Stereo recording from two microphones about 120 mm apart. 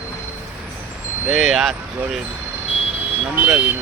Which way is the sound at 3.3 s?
15° right (ahead or behind).